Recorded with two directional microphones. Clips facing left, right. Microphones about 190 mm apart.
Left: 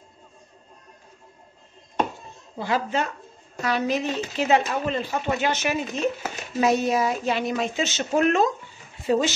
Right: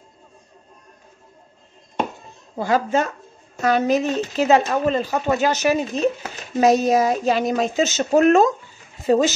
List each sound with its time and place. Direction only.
2.5 s a woman's voice: 45° right (ahead or behind)